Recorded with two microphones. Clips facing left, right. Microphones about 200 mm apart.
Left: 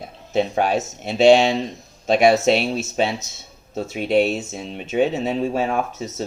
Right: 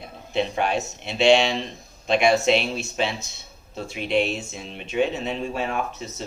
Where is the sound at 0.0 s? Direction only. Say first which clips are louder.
Left 4 dB; 45° left (ahead or behind).